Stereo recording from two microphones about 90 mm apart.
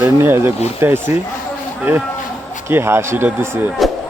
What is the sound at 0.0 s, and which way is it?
Speech, 25° right (ahead or behind).